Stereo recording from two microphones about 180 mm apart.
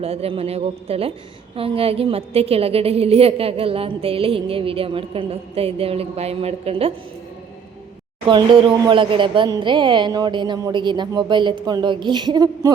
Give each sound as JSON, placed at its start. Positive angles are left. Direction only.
{"t": 0.0, "sound": "a woman's voice", "side_deg": -35}
{"t": 8.3, "sound": "speech", "side_deg": -25}